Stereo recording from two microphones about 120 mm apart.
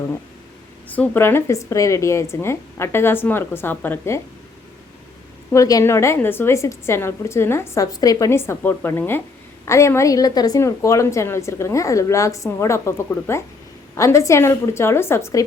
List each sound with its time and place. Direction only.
0.9 s a woman's voice: 15° left (ahead or behind)
5.5 s a woman's voice: 30° left (ahead or behind)